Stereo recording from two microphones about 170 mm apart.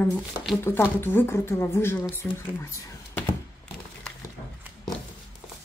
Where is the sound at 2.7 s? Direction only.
15° left (ahead or behind).